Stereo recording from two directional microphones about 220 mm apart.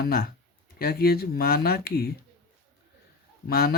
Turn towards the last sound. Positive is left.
turn(degrees=45)  # may be behind; listen again after turning